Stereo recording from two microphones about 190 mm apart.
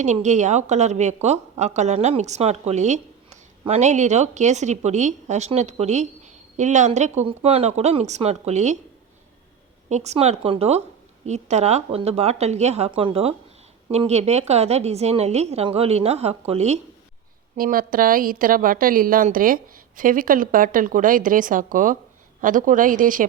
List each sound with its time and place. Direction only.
0.0 s a woman's voice: 40° right (ahead or behind)
9.9 s a woman's voice: 35° right (ahead or behind)
17.6 s a woman's voice: 50° right (ahead or behind)